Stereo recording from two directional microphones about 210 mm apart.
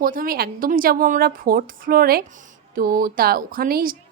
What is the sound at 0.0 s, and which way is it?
A woman's voice, 40° right (ahead or behind).